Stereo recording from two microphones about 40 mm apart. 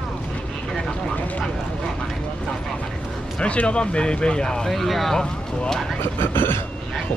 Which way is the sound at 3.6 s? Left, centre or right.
Left.